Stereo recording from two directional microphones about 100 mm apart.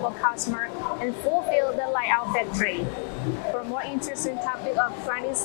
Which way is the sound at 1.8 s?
20° left (ahead or behind).